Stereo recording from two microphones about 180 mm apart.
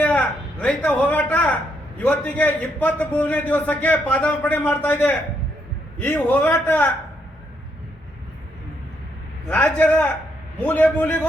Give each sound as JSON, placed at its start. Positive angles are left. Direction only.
{"t": 0.0, "sound": "a man's voice", "side_deg": 5}
{"t": 9.5, "sound": "a man's voice", "side_deg": 10}